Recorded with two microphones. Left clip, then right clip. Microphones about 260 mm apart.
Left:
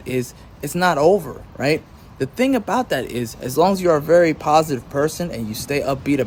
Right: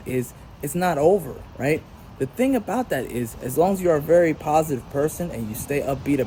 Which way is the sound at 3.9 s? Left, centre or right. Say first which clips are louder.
Left 2 dB; left.